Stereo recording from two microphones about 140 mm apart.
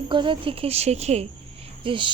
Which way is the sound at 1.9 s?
35° right (ahead or behind).